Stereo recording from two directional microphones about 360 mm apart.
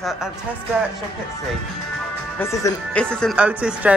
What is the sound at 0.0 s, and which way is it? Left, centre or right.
Speech, centre.